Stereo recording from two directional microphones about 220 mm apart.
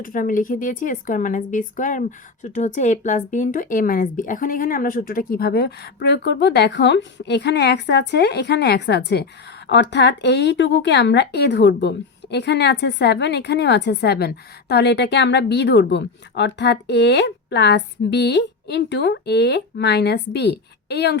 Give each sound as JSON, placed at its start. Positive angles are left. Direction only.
{"t": 0.0, "sound": "speech", "side_deg": 40}